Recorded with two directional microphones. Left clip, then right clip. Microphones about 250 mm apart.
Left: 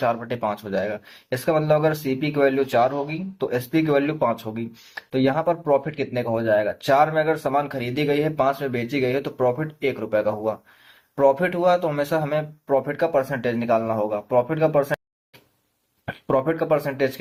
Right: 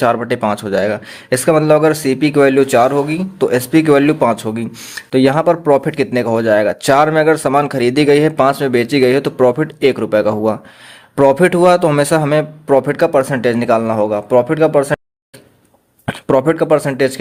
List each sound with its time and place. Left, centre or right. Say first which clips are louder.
0.0 s speech: right 9 dB; right
16.0 s speech: right 9 dB; right